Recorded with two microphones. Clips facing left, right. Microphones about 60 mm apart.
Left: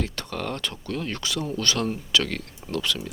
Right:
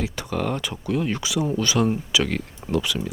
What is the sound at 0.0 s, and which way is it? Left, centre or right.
Speech, centre.